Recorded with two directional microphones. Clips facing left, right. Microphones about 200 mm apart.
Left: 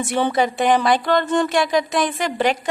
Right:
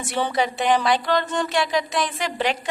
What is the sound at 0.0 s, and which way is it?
A woman's voice, 50° left (ahead or behind).